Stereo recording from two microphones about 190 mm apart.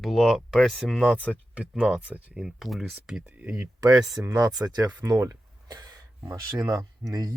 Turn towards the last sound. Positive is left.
turn(degrees=-20)  # may be behind; listen again after turning